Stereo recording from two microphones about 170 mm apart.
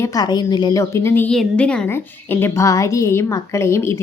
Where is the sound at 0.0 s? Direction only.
20° left (ahead or behind).